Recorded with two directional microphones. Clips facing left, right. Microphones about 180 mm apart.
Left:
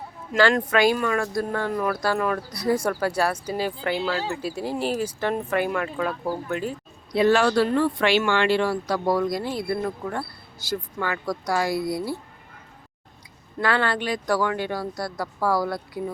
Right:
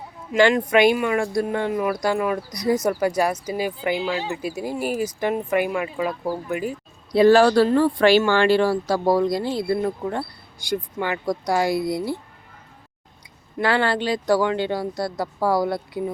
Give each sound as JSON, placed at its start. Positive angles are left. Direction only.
{"t": 0.3, "sound": "speech", "side_deg": -15}
{"t": 7.1, "sound": "speech", "side_deg": -35}
{"t": 13.6, "sound": "speech", "side_deg": -30}